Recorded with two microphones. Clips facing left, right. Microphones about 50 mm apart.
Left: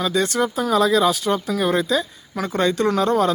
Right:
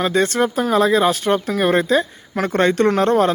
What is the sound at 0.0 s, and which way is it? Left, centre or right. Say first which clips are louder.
Speech: right 3 dB; right.